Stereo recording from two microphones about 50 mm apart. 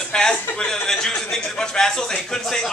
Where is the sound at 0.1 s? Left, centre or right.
Centre.